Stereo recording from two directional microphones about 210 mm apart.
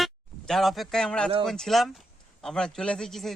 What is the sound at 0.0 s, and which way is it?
A man's voice, centre (ahead or behind).